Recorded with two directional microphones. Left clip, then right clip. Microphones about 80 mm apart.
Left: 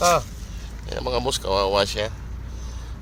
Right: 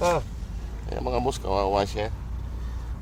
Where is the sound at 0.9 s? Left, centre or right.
Right.